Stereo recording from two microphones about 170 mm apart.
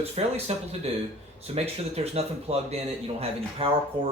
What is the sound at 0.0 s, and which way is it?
Speech, 35° right (ahead or behind).